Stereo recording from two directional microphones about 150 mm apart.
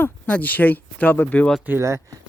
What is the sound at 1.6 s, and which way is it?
Speech, 15° right (ahead or behind).